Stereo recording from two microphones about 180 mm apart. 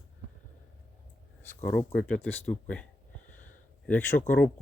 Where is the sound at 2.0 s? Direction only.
5° left (ahead or behind).